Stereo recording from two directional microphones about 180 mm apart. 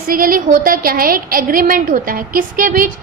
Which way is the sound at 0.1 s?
50° right (ahead or behind).